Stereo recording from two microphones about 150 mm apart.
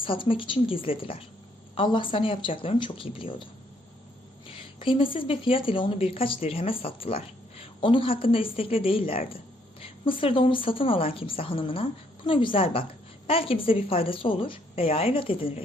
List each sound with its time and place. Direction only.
0.0 s a woman's voice: 35° left (ahead or behind)
4.5 s a woman's voice: 35° left (ahead or behind)